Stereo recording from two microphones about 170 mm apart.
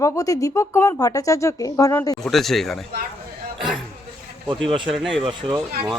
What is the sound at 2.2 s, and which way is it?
Speech, centre (ahead or behind).